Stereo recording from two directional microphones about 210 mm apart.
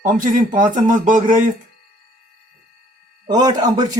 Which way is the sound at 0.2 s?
40° right (ahead or behind).